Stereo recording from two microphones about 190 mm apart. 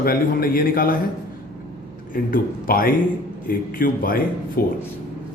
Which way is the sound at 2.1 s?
50° left (ahead or behind).